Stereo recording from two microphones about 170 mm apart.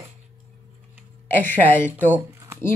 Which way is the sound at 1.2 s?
10° left (ahead or behind).